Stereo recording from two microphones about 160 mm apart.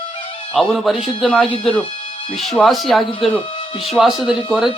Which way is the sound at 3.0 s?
35° left (ahead or behind).